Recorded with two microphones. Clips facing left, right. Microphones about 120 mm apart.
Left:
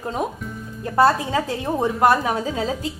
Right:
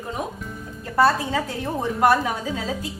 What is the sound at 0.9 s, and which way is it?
Speech, 20° left (ahead or behind).